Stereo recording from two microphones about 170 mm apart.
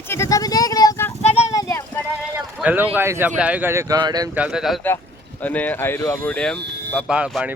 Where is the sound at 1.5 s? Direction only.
20° left (ahead or behind).